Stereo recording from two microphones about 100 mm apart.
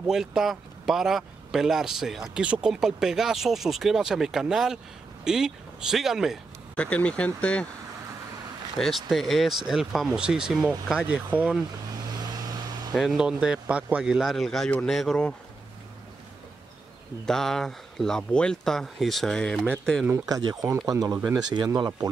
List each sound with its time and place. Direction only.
0.0 s speech: 5° right (ahead or behind)
6.8 s speech: 15° left (ahead or behind)
8.7 s speech: centre (ahead or behind)
12.9 s speech: 5° right (ahead or behind)
17.3 s speech: 5° left (ahead or behind)
20.2 s speech: 35° right (ahead or behind)